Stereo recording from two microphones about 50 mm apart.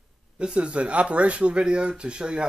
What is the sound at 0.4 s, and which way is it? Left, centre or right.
Speech, right.